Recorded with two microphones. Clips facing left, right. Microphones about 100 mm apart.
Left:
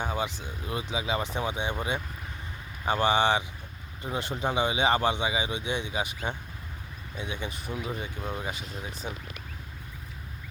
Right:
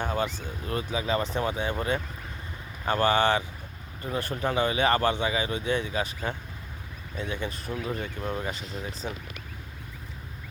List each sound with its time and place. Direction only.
0.0 s speech: 15° left (ahead or behind)
2.8 s speech: 15° left (ahead or behind)
7.2 s speech: 20° left (ahead or behind)